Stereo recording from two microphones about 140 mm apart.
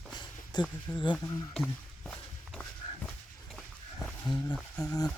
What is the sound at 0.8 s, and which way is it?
Speech, 30° left (ahead or behind).